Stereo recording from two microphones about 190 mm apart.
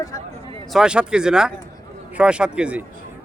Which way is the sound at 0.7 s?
5° right (ahead or behind).